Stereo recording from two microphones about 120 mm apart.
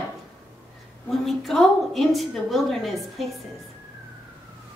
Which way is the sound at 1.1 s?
Centre (ahead or behind).